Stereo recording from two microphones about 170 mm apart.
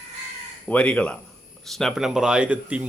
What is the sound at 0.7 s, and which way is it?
Speech, 5° left (ahead or behind).